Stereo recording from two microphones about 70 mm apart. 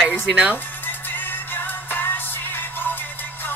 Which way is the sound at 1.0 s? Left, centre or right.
Left.